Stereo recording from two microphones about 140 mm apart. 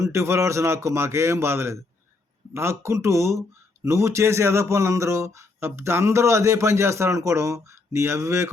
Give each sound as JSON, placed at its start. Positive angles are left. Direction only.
{"t": 0.0, "sound": "speech", "side_deg": -20}